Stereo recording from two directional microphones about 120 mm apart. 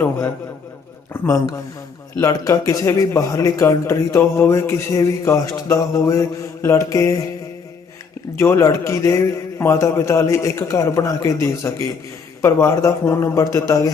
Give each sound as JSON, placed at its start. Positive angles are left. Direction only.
{"t": 1.1, "sound": "a man's voice", "side_deg": 25}
{"t": 8.4, "sound": "a man's voice", "side_deg": 25}